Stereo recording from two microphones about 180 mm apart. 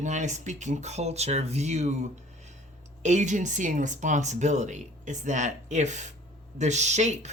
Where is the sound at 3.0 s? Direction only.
40° right (ahead or behind).